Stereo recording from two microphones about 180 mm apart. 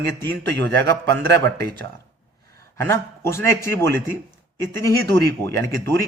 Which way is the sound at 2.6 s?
15° left (ahead or behind).